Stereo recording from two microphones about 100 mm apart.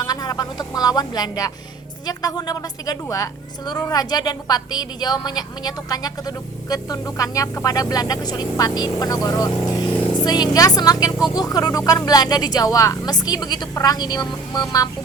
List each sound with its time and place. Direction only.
0.0 s a woman's voice: 40° left (ahead or behind)